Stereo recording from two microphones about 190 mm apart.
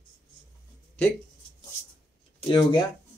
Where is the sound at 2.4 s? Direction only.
25° left (ahead or behind).